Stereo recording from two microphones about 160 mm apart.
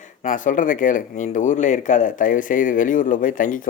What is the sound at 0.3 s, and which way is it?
Speech, 55° left (ahead or behind).